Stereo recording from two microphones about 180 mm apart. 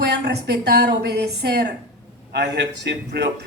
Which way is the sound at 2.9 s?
70° right (ahead or behind).